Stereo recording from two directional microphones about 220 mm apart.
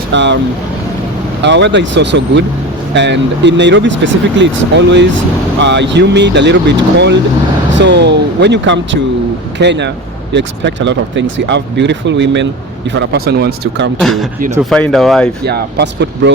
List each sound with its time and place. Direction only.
0.1 s speech: 55° right (ahead or behind)
1.4 s speech: 55° right (ahead or behind)
7.8 s speech: 50° right (ahead or behind)
14.0 s speech: centre (ahead or behind)
15.4 s speech: 50° right (ahead or behind)